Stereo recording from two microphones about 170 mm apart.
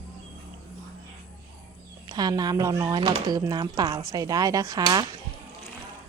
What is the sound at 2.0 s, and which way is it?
Speech, 25° right (ahead or behind).